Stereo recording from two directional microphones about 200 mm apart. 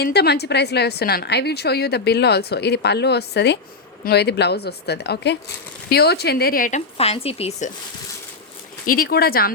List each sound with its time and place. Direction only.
0.0 s a woman's voice: 55° left (ahead or behind); by 7.7 s 30° left (ahead or behind)
8.9 s speech: 50° left (ahead or behind)